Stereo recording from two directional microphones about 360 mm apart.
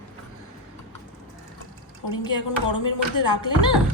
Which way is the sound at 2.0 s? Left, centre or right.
Left.